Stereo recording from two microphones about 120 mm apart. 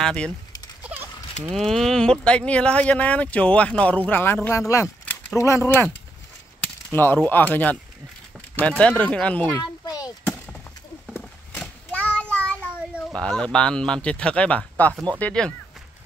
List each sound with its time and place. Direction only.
0.0 s speech: 5° left (ahead or behind)
1.4 s speech: centre (ahead or behind); by 5.7 s 25° left (ahead or behind)
6.9 s speech: 20° left (ahead or behind)
9.8 s a sound: 30° left (ahead or behind)
11.6 s child singing: 10° left (ahead or behind)
13.1 s speech: 5° left (ahead or behind)